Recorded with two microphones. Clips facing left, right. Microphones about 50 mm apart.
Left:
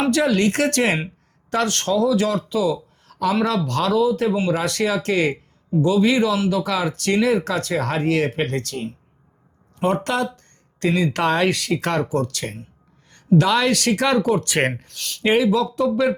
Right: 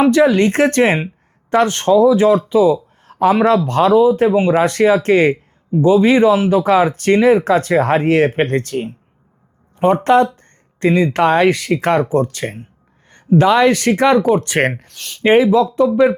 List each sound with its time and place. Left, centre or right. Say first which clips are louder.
0.0 s speech: right 7 dB; centre
9.7 s speech: right 9 dB; centre